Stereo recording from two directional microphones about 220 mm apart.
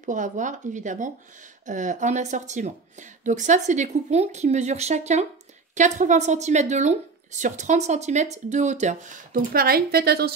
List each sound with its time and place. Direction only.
0.0 s speech: 35° right (ahead or behind)